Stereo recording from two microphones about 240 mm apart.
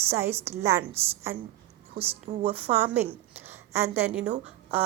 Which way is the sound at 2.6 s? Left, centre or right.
Centre.